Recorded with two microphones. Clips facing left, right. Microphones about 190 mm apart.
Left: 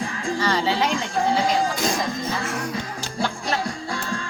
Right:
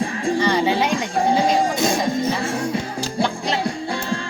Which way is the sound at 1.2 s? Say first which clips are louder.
Right 3 dB; 20° right (ahead or behind).